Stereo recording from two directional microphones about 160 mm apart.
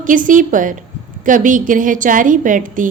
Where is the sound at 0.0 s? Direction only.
55° right (ahead or behind).